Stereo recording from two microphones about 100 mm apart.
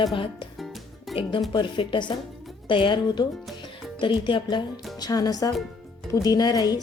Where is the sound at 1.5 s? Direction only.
55° left (ahead or behind).